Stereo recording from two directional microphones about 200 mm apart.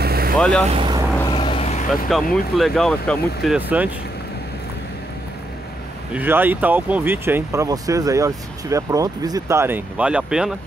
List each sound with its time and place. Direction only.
0.0 s vehicle: 50° right (ahead or behind)
0.4 s speech: 5° left (ahead or behind)
0.7 s speech: 25° right (ahead or behind)
1.3 s vehicle: 25° left (ahead or behind)
2.0 s speech: centre (ahead or behind)
3.5 s speech: 10° right (ahead or behind)
6.1 s speech: 10° right (ahead or behind)